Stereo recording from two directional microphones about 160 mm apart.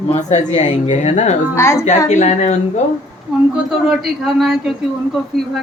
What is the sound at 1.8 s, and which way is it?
Speech, 45° left (ahead or behind).